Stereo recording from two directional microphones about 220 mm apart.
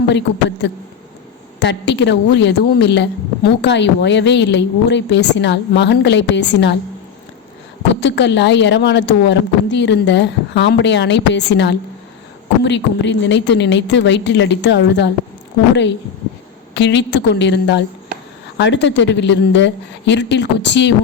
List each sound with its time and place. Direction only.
1.5 s a woman's voice: 50° left (ahead or behind)
8.0 s a woman's voice: 55° left (ahead or behind)
16.7 s a woman's voice: 55° left (ahead or behind)